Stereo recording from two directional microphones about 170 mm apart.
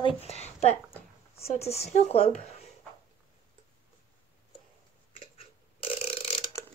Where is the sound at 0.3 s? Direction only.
40° left (ahead or behind).